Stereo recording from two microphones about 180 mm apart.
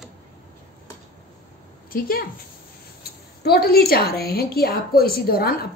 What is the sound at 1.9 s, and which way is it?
A woman's voice, 55° left (ahead or behind).